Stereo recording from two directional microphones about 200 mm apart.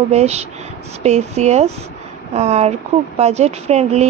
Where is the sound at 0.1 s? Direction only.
30° right (ahead or behind).